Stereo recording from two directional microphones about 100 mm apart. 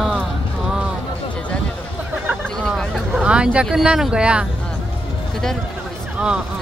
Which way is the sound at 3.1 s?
10° right (ahead or behind).